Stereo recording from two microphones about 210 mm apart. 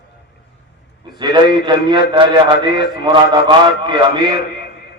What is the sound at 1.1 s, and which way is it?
A man's voice, 20° right (ahead or behind).